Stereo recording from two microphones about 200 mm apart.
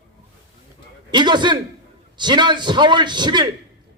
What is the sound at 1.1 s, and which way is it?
A man's voice, 20° right (ahead or behind).